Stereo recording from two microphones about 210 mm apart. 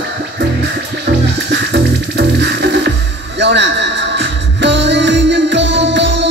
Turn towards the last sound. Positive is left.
turn(degrees=-55)  # may be behind; listen again after turning